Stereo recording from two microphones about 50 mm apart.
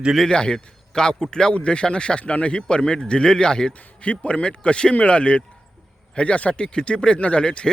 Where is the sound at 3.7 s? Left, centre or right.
Left.